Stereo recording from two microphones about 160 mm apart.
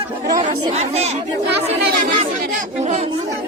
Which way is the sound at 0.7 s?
45° right (ahead or behind).